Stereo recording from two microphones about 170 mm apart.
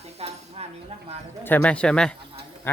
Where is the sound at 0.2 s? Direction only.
40° right (ahead or behind).